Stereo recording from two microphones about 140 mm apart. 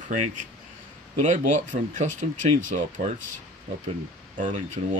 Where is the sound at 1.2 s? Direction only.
60° right (ahead or behind).